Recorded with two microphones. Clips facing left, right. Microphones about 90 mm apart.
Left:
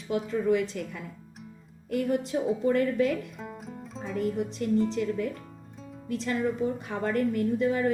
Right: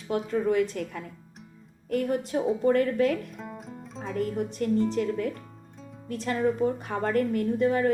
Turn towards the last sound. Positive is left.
turn(degrees=-45)  # may be behind; listen again after turning